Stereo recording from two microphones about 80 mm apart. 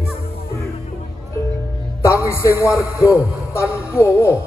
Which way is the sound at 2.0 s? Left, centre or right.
Left.